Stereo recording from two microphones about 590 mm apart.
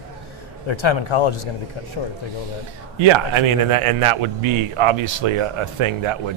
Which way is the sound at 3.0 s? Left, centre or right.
Right.